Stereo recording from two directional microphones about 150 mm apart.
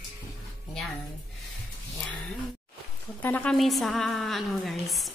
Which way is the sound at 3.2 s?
10° left (ahead or behind).